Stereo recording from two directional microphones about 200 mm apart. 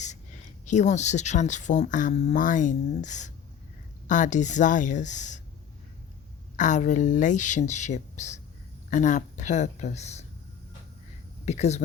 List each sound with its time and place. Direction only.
0.6 s speech: 35° left (ahead or behind)
6.6 s speech: 40° left (ahead or behind)
11.4 s speech: 35° left (ahead or behind)